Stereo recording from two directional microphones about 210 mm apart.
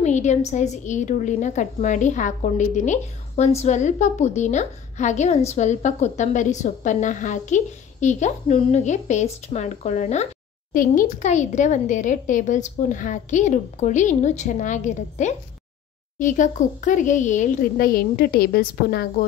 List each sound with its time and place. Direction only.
0.0 s a woman's voice: 35° left (ahead or behind)